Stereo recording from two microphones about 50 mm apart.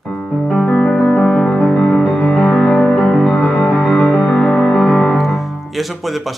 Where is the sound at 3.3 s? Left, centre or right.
Left.